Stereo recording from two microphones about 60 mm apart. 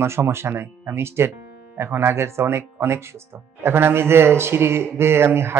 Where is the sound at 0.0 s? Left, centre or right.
Right.